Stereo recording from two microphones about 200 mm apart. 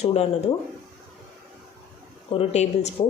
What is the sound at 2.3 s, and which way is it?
Speech, 30° left (ahead or behind).